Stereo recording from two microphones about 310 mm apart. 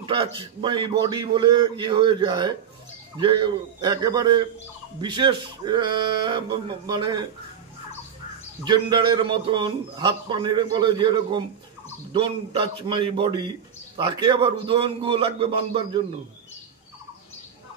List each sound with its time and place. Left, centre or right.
0.0 s a man's voice: centre
8.6 s a man's voice: centre